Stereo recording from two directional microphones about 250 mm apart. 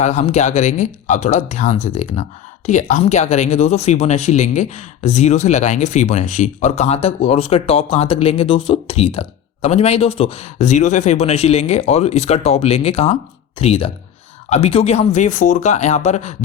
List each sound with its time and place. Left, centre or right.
0.0 s speech: left